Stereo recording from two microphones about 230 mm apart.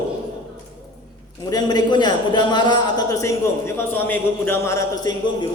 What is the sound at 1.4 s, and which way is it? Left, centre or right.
A man's voice, centre.